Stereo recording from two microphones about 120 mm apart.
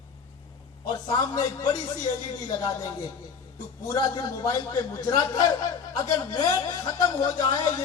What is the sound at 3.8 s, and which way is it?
A man's voice, 30° left (ahead or behind).